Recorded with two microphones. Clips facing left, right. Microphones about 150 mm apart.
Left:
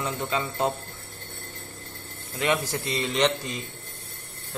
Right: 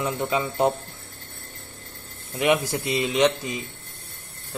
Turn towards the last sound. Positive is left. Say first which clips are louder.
# right 3 dB
turn(degrees=-10)  # may be behind; listen again after turning